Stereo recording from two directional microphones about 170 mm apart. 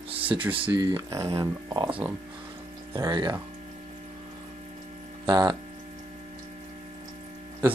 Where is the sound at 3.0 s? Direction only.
25° right (ahead or behind).